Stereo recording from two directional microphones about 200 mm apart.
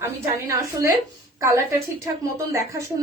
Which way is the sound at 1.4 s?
15° right (ahead or behind).